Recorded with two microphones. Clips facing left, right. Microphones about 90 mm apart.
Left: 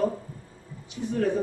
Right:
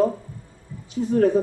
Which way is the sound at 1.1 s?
40° right (ahead or behind).